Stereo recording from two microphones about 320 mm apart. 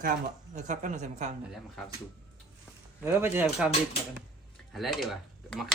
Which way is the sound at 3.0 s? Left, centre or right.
Centre.